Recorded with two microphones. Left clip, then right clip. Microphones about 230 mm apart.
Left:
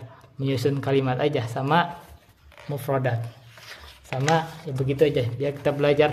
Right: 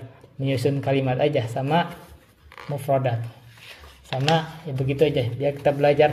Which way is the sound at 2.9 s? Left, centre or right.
Centre.